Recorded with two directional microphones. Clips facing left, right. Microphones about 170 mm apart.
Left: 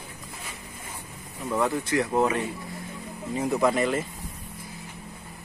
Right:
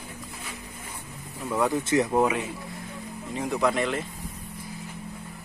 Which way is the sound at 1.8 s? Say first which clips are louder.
Right 2 dB; 25° right (ahead or behind).